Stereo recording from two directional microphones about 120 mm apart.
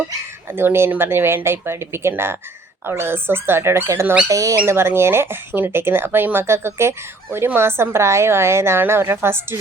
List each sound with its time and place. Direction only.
0.5 s speech: 20° right (ahead or behind)